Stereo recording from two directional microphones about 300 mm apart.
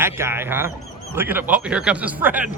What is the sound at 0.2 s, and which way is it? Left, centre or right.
Speech, centre.